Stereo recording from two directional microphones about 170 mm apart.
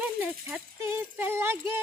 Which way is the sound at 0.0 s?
10° right (ahead or behind).